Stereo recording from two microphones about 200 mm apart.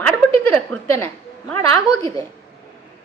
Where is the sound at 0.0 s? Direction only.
5° left (ahead or behind).